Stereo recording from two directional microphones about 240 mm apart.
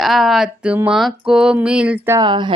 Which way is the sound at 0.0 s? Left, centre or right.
Centre.